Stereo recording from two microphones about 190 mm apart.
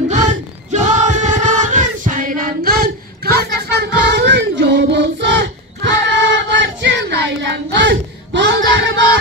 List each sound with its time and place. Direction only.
0.1 s choir: 40° right (ahead or behind)
4.1 s choir: 65° right (ahead or behind)